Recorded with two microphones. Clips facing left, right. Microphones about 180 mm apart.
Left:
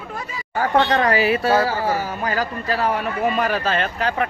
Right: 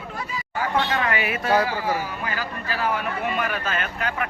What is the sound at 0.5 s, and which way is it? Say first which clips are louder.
Speech: left 6 dB; 45° left (ahead or behind).